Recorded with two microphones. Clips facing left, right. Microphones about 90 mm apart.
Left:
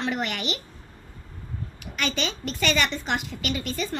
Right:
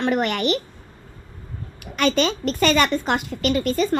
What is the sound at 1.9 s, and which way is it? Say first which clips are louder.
A woman's voice: right 9 dB; 50° right (ahead or behind).